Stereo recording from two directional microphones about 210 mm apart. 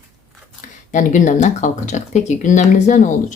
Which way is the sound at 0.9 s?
35° left (ahead or behind).